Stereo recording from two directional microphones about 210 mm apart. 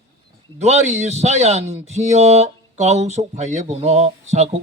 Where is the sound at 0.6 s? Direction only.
30° right (ahead or behind).